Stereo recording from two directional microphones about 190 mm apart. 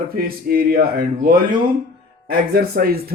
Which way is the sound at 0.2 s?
50° right (ahead or behind).